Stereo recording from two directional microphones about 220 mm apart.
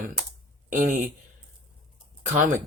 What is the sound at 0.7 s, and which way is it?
Speech, 35° right (ahead or behind).